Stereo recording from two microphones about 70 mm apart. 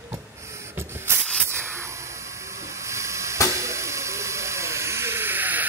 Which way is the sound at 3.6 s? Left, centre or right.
Right.